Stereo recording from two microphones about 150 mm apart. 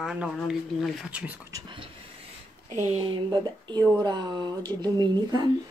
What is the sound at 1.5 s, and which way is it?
Speech, 30° right (ahead or behind).